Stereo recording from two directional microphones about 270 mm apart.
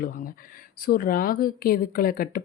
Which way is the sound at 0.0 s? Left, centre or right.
Left.